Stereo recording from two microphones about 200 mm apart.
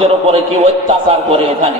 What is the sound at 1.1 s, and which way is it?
Speech, 30° right (ahead or behind).